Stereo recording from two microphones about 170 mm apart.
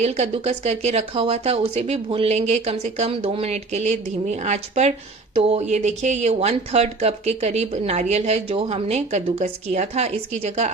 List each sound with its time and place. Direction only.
0.0 s speech: 40° right (ahead or behind)